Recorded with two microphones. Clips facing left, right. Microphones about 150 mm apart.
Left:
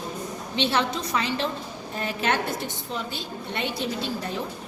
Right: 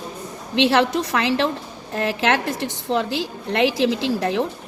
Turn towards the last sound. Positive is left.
turn(degrees=-85)